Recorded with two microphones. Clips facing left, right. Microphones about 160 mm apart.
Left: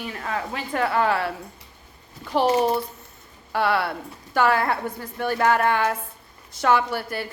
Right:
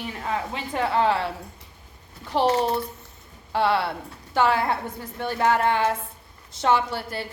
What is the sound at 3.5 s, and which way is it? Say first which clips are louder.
A woman's voice: even; 25° right (ahead or behind).